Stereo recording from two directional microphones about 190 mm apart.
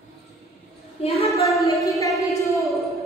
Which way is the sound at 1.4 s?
15° left (ahead or behind).